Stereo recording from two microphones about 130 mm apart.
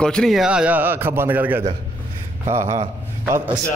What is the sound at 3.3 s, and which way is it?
Speech, 15° right (ahead or behind).